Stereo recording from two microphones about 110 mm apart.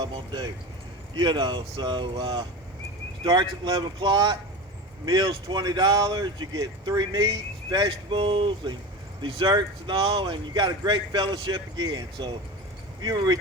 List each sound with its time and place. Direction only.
0.0 s speech: 40° right (ahead or behind)